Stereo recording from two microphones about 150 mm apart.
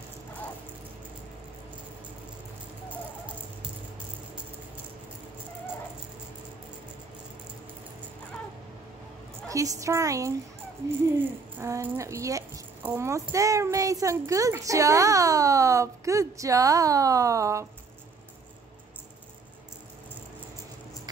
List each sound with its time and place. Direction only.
9.5 s speech: 20° right (ahead or behind)
11.6 s speech: 20° right (ahead or behind)